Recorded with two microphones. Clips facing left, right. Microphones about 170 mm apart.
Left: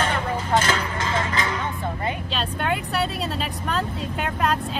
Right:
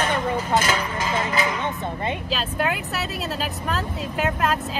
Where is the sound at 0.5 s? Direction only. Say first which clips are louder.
Left 2 dB; 10° right (ahead or behind).